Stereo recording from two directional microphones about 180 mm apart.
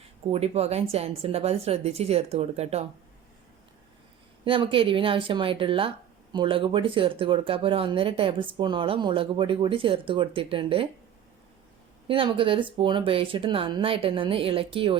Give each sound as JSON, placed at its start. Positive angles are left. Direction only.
{"t": 0.3, "sound": "speech", "side_deg": -35}
{"t": 4.4, "sound": "speech", "side_deg": -30}
{"t": 12.0, "sound": "speech", "side_deg": -30}